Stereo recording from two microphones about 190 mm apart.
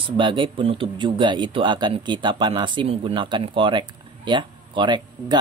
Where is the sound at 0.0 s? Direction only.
25° right (ahead or behind).